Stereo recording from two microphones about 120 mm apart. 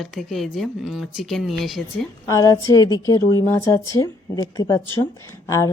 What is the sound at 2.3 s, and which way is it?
A woman's voice, 30° left (ahead or behind).